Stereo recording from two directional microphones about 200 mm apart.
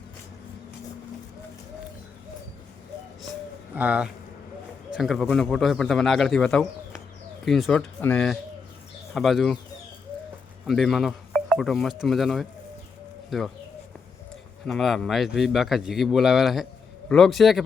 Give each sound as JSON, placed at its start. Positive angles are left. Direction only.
{"t": 3.8, "sound": "a man's voice", "side_deg": -5}
{"t": 10.7, "sound": "a man's voice", "side_deg": 0}
{"t": 14.7, "sound": "a man's voice", "side_deg": 0}